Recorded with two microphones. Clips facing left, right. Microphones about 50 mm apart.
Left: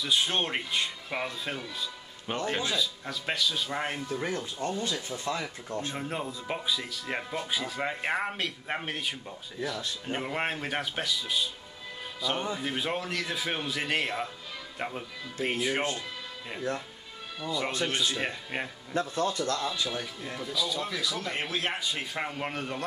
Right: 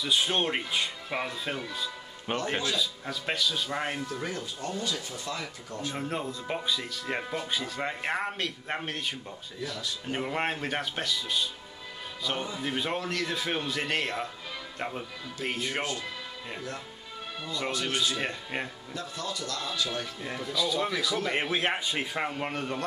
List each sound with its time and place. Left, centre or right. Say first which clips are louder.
0.0 s speech: right 1 dB; centre
2.3 s a man's voice: right 2 dB; centre
2.7 s speech: even; centre
4.1 s speech: left 2 dB; left
5.9 s speech: right 1 dB; centre
17.6 s speech: right 2 dB; left
18.1 s speech: even; centre
18.9 s speech: left 7 dB; left
20.3 s speech: right 3 dB; centre
21.3 s a man's voice: right 4 dB; right
22.0 s speech: right 2 dB; centre